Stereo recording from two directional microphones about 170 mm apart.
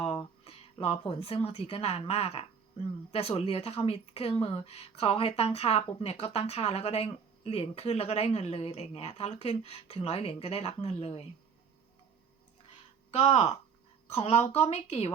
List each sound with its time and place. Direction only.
0.0 s speech: 35° left (ahead or behind)
13.1 s speech: 35° left (ahead or behind)